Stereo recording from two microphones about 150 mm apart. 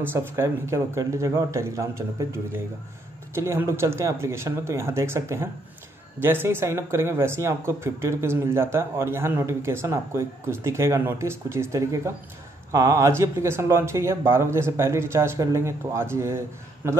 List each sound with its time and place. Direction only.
0.0 s speech: 15° right (ahead or behind)